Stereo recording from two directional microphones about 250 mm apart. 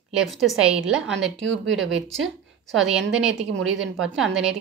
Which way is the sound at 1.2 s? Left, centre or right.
Right.